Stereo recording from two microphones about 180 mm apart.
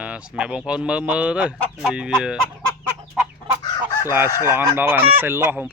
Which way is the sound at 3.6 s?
20° left (ahead or behind).